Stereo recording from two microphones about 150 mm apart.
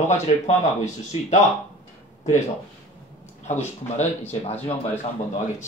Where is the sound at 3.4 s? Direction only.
50° left (ahead or behind).